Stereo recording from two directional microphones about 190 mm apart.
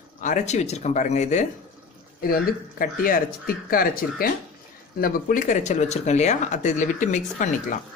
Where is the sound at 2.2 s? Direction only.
50° left (ahead or behind).